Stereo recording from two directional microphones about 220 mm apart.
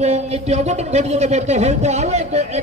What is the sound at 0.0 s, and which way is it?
Speech, 30° right (ahead or behind).